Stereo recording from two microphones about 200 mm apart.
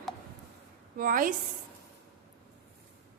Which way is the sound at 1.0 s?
45° right (ahead or behind).